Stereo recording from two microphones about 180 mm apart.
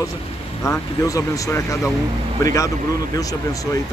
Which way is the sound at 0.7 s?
20° left (ahead or behind).